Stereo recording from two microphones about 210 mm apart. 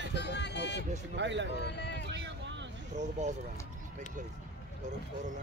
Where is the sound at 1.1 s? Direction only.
55° right (ahead or behind).